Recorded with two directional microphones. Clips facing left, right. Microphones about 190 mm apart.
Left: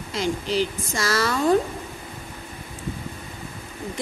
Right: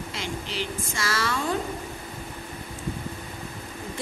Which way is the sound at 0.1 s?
40° left (ahead or behind).